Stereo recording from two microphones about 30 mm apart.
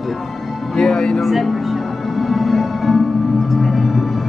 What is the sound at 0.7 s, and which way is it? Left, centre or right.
Speech, left.